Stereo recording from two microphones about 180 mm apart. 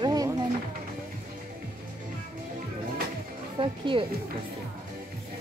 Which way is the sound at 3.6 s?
30° right (ahead or behind).